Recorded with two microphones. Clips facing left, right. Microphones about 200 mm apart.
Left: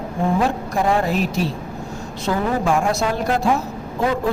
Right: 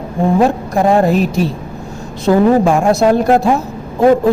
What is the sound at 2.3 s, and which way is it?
A woman's voice, 45° right (ahead or behind).